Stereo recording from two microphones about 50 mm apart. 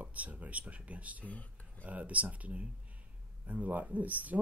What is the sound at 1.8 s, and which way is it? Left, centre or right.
Speech, right.